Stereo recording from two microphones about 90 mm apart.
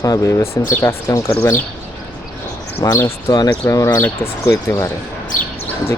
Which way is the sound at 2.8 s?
50° left (ahead or behind).